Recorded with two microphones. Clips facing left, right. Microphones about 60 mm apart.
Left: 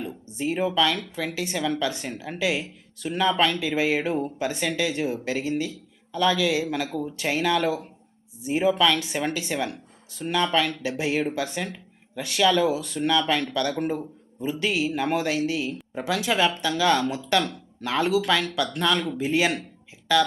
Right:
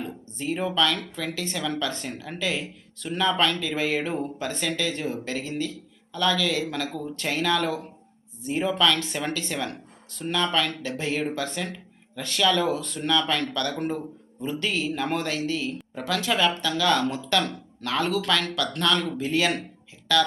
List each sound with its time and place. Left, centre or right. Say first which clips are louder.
0.3 s speech: left 3 dB; centre